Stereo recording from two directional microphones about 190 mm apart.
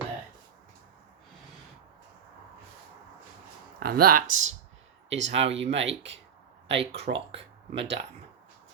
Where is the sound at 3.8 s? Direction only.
50° right (ahead or behind).